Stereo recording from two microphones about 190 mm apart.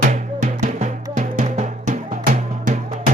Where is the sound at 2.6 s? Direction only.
40° right (ahead or behind).